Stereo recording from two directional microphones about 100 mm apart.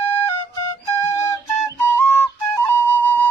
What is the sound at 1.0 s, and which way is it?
Flute, 30° left (ahead or behind).